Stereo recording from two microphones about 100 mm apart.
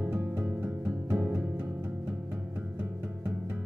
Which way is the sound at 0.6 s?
10° right (ahead or behind).